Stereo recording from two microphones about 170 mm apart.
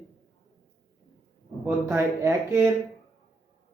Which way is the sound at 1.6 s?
15° right (ahead or behind).